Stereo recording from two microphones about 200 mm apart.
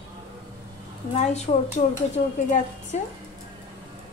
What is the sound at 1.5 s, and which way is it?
Speech, 35° left (ahead or behind).